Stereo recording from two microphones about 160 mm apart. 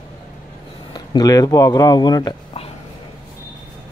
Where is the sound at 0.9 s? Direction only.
25° left (ahead or behind).